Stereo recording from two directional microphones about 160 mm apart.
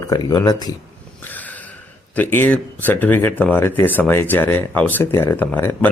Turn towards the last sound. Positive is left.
turn(degrees=15)  # may be behind; listen again after turning